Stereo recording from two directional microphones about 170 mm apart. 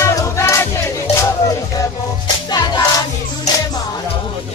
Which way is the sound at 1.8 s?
20° left (ahead or behind).